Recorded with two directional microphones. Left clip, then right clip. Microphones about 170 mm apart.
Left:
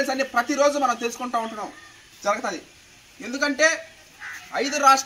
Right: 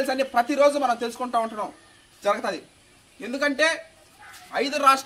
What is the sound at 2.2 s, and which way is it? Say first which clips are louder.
A man's voice: even; 35° right (ahead or behind).